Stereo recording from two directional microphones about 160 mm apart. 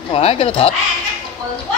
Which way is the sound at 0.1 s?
35° left (ahead or behind).